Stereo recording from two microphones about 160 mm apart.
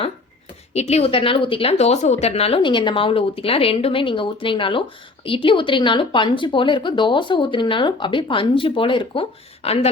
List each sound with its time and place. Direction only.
0.7 s a woman's voice: 40° left (ahead or behind)